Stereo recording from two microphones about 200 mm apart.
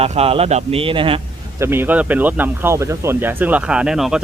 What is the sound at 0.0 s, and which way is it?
A man's voice, 30° right (ahead or behind).